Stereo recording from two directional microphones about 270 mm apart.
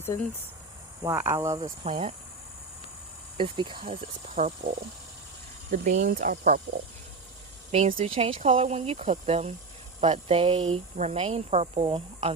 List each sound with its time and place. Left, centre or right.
1.0 s speech: centre
3.3 s speech: centre
5.7 s speech: right
7.7 s speech: right